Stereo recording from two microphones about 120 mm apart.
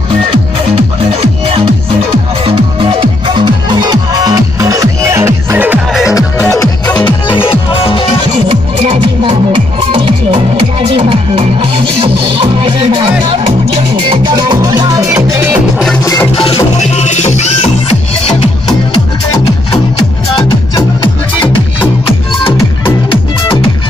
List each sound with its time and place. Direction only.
2.4 s music: 45° right (ahead or behind); by 5.8 s 20° right (ahead or behind)
7.1 s music: 45° left (ahead or behind)
8.5 s music: 55° right (ahead or behind)
14.0 s music: 50° right (ahead or behind)
14.3 s music: 30° right (ahead or behind)
16.0 s music: 30° left (ahead or behind)
16.3 s music: 50° left (ahead or behind)
20.3 s music: 35° left (ahead or behind)